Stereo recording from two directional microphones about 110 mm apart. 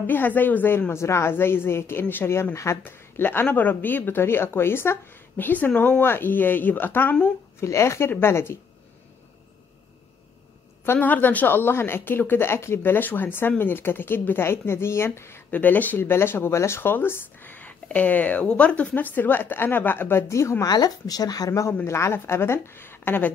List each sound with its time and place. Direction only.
0.0 s a woman's voice: 15° left (ahead or behind)
10.9 s a woman's voice: 15° left (ahead or behind)